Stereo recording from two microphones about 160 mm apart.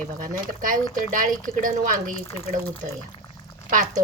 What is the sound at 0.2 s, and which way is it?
Speech, 55° right (ahead or behind).